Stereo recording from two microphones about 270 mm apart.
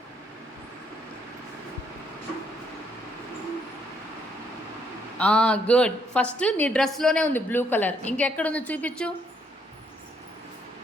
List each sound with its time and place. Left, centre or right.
5.1 s a woman's voice: centre